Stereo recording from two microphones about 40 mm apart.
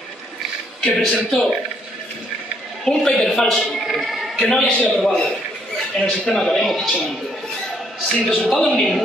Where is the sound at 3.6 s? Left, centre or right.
Centre.